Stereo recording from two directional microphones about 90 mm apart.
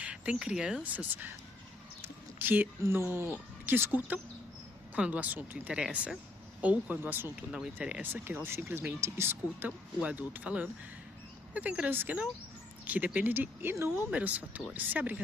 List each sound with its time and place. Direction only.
0.0 s speech: 10° right (ahead or behind)
2.0 s bird: 20° right (ahead or behind)
2.8 s speech: 25° right (ahead or behind)
5.8 s speech: 5° right (ahead or behind)
6.6 s speech: 15° right (ahead or behind)
7.5 s speech: 5° right (ahead or behind)
8.1 s speech: 25° right (ahead or behind)
14.1 s speech: 15° right (ahead or behind)